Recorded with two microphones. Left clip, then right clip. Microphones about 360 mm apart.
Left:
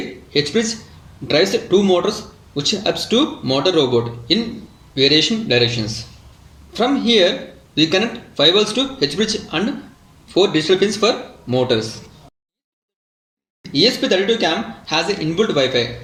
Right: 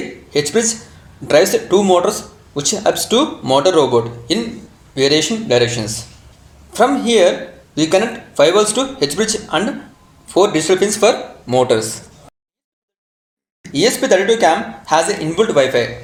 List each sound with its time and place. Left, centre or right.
0.3 s speech: centre
13.7 s speech: centre